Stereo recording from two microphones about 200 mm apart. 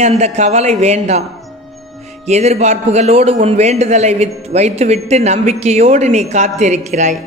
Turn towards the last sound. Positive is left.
turn(degrees=-35)  # may be behind; listen again after turning